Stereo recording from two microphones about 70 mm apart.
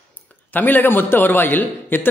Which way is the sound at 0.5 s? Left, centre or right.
Left.